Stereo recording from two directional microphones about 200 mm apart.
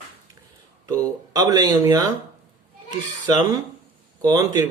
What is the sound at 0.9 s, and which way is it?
Speech, 15° right (ahead or behind).